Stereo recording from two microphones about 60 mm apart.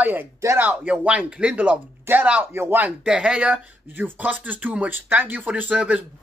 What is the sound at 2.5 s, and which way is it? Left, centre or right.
Speech, right.